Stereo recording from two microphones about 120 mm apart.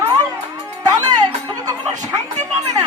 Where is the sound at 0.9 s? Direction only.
35° right (ahead or behind).